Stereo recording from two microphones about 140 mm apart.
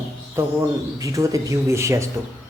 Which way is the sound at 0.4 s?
20° right (ahead or behind).